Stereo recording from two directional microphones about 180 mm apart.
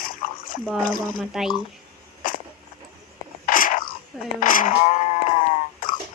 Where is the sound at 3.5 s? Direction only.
50° left (ahead or behind).